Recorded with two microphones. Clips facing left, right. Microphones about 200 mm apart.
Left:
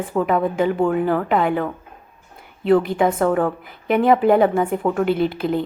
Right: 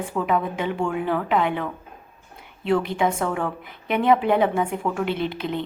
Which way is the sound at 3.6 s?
Centre (ahead or behind).